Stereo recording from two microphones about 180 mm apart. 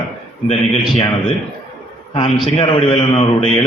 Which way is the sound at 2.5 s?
35° left (ahead or behind).